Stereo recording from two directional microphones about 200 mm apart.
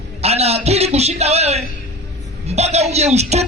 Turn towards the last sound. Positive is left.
turn(degrees=-35)  # may be behind; listen again after turning